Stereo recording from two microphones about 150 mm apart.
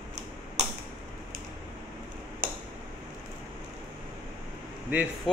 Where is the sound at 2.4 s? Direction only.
65° right (ahead or behind).